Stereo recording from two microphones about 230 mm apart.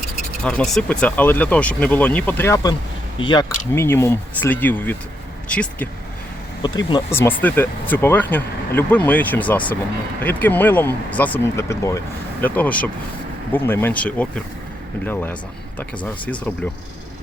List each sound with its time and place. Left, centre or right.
0.4 s speech: centre
6.6 s speech: centre